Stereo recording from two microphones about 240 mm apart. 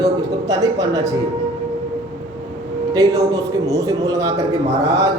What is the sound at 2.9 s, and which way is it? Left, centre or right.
A man's voice, centre.